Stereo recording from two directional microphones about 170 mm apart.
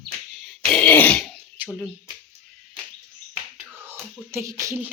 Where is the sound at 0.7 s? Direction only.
10° left (ahead or behind).